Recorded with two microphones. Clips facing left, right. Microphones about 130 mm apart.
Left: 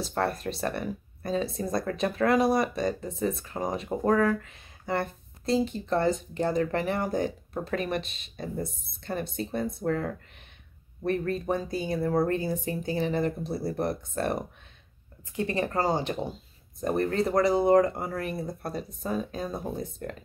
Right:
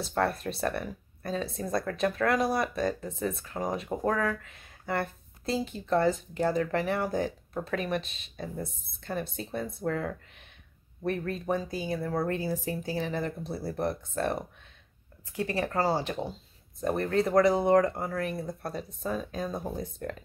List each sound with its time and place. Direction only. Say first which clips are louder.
0.3 s speech: even; centre (ahead or behind)
4.9 s speech: left 2 dB; 5° right (ahead or behind)
12.0 s speech: left 7 dB; 20° left (ahead or behind)
12.6 s speech: left 3 dB; centre (ahead or behind)
13.5 s speech: left 4 dB; 15° left (ahead or behind)
13.7 s speech: left 1 dB; centre (ahead or behind)